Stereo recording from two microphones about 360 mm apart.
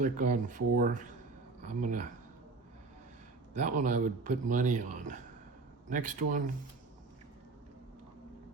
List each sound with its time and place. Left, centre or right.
0.0 s speech: right
3.5 s speech: centre